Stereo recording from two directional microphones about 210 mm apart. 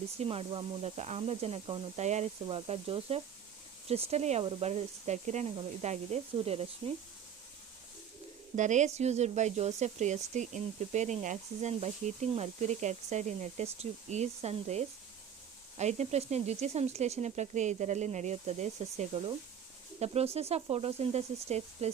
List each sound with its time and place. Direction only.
0.2 s speech: 25° right (ahead or behind)
8.5 s speech: 35° right (ahead or behind)